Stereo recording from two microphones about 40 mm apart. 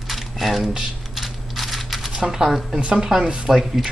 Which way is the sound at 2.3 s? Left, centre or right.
Centre.